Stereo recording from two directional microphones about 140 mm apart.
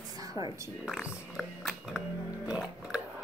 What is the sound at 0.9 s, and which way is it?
Music, 5° right (ahead or behind).